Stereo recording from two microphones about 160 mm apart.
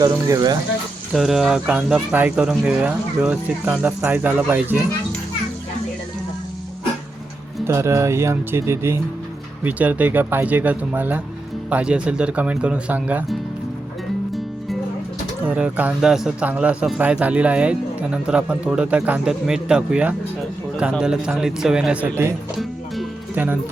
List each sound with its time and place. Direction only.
0.0 s speech: 25° right (ahead or behind)
1.1 s speech: centre (ahead or behind)
7.6 s speech: 15° right (ahead or behind)
15.4 s a man's voice: 10° right (ahead or behind)
22.5 s music: 5° right (ahead or behind)